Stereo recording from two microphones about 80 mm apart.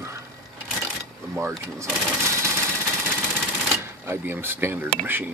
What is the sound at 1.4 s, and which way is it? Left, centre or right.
Speech, right.